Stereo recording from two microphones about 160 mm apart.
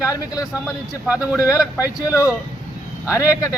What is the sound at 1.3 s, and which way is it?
Speech, 5° right (ahead or behind).